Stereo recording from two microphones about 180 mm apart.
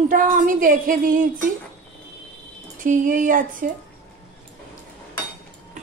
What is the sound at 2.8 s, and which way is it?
Speech, 45° right (ahead or behind).